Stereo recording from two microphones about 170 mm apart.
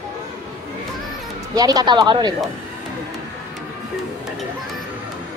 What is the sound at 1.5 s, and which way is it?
Speech, 20° right (ahead or behind).